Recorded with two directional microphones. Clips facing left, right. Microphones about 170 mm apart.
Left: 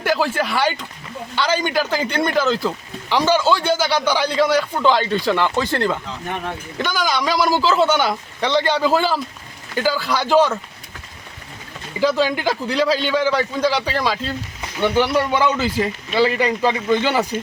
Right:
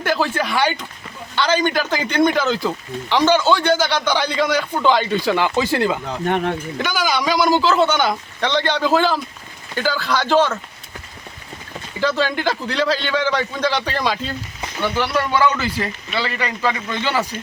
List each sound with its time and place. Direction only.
0.0 s speech: 5° left (ahead or behind)
6.1 s speech: 65° right (ahead or behind)
6.7 s speech: centre (ahead or behind)
11.9 s speech: 10° left (ahead or behind)
14.8 s speech: 20° left (ahead or behind)